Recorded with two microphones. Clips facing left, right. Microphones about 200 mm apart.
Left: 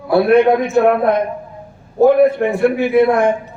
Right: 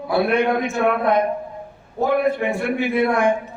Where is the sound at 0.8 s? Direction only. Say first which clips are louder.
Left 5 dB; 50° left (ahead or behind).